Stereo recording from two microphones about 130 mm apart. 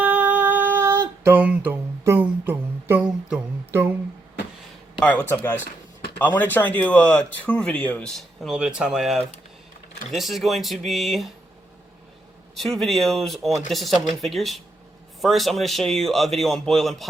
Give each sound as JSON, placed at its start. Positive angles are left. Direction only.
{"t": 0.0, "sound": "music", "side_deg": -10}
{"t": 3.7, "sound": "a sound", "side_deg": -20}
{"t": 4.9, "sound": "a man's voice", "side_deg": 10}
{"t": 12.5, "sound": "a man's voice", "side_deg": 0}